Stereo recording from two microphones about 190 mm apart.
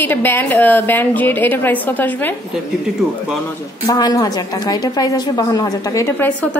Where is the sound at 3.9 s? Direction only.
20° left (ahead or behind).